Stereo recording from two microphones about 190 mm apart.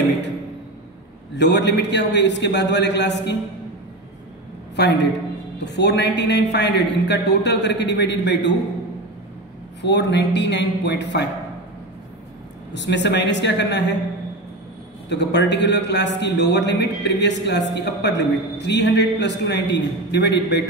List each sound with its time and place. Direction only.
1.3 s a man's voice: 65° left (ahead or behind)
4.7 s a man's voice: 65° left (ahead or behind)
9.8 s a man's voice: 65° left (ahead or behind)
12.7 s a man's voice: 65° left (ahead or behind)
15.0 s a man's voice: 65° left (ahead or behind)